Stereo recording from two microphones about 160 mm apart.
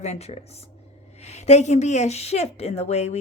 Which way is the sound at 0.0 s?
40° left (ahead or behind).